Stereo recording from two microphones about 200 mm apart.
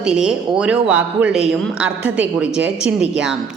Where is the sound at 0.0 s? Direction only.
5° right (ahead or behind).